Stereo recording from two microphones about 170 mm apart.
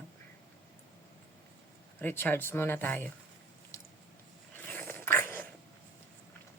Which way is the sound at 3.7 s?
15° left (ahead or behind).